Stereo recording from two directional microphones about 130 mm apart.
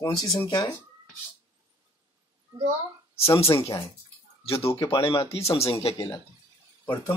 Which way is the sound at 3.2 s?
50° left (ahead or behind).